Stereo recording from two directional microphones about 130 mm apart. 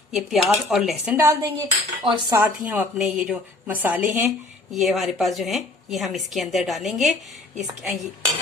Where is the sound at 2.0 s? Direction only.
40° right (ahead or behind).